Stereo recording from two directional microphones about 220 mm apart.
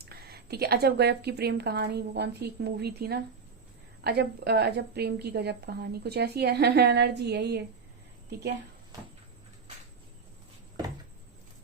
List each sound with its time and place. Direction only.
0.0 s a woman's voice: 45° right (ahead or behind)